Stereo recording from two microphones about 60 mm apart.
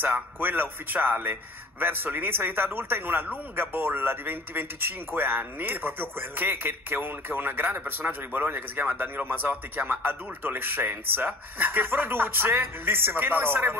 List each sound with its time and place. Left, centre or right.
0.0 s speech: right